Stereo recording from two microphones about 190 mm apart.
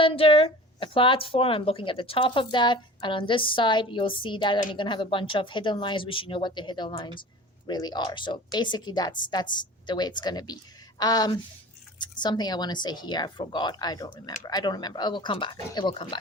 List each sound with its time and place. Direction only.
0.0 s speech: 30° left (ahead or behind)